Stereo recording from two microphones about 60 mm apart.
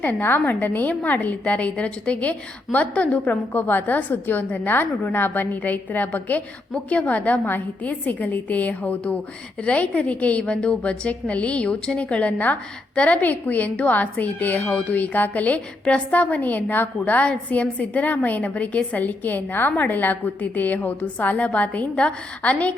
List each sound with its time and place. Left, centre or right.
0.0 s a woman's voice: left